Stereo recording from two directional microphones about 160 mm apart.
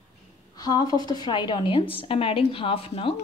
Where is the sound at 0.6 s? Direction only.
25° left (ahead or behind).